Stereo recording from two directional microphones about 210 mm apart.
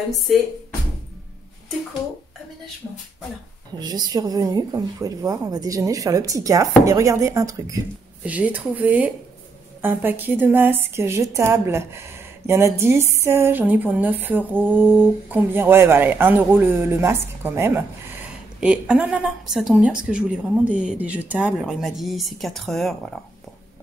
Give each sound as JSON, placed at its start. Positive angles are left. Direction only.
{"t": 3.7, "sound": "a woman's voice", "side_deg": -20}